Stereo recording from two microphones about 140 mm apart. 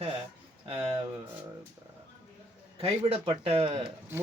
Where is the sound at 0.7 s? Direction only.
35° right (ahead or behind).